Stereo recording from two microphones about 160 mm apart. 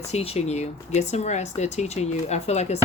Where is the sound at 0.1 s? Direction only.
40° left (ahead or behind).